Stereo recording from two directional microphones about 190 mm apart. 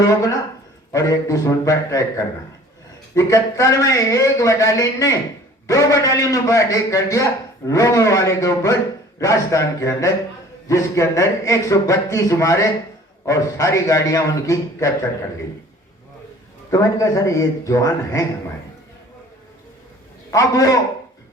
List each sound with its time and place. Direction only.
0.9 s a man's voice: 15° left (ahead or behind)
16.7 s a man's voice: 15° left (ahead or behind)
20.3 s a man's voice: 15° left (ahead or behind)